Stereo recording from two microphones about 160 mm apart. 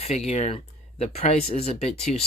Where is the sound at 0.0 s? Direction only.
40° left (ahead or behind).